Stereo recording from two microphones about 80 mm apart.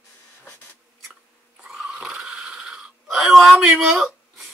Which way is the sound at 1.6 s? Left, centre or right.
Centre.